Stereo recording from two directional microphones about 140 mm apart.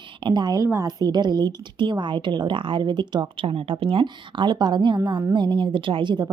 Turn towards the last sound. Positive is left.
turn(degrees=-30)  # may be behind; listen again after turning